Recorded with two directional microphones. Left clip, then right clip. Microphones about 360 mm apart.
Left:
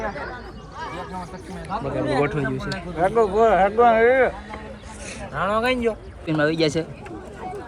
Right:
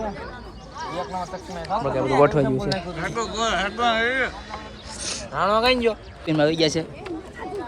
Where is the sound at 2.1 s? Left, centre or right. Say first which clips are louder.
Right 7 dB; centre.